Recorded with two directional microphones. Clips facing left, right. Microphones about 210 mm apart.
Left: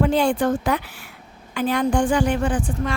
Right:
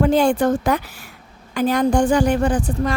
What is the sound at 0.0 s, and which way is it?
A woman's voice, 45° right (ahead or behind).